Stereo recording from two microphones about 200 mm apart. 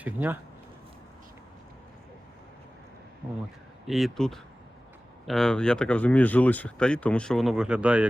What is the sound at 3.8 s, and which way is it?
Speech, centre (ahead or behind).